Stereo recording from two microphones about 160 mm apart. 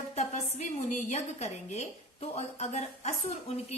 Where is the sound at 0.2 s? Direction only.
50° left (ahead or behind).